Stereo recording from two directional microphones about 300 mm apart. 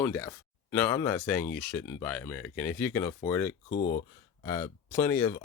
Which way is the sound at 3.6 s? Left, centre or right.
Left.